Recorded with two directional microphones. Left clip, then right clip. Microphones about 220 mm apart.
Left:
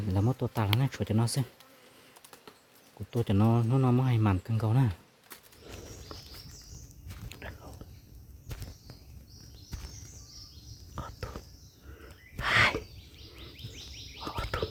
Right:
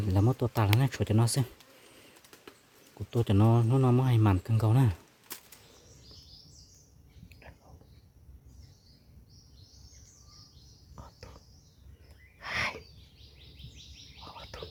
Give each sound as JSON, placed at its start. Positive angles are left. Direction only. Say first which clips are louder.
{"t": 0.0, "sound": "speech", "louder": "right 2 dB", "side_deg": -10}
{"t": 3.1, "sound": "speech", "louder": "right 1 dB", "side_deg": -10}
{"t": 6.1, "sound": "bird", "louder": "left 7 dB", "side_deg": 50}
{"t": 7.3, "sound": "biting", "louder": "left 9 dB", "side_deg": 45}
{"t": 10.9, "sound": "whispering", "louder": "left 10 dB", "side_deg": 45}
{"t": 12.4, "sound": "a sound", "louder": "left 8 dB", "side_deg": 40}
{"t": 14.2, "sound": "a sound", "louder": "left 10 dB", "side_deg": 45}